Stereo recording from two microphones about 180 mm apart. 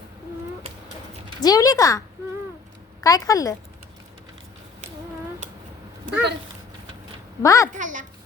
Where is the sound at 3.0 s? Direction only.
20° left (ahead or behind).